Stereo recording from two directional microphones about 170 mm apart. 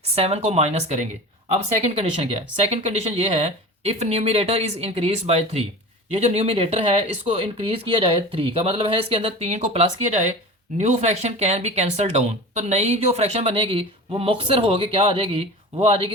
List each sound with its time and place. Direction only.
0.2 s speech: 40° right (ahead or behind)